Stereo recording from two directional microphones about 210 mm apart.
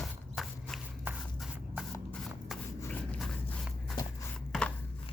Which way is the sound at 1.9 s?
5° left (ahead or behind).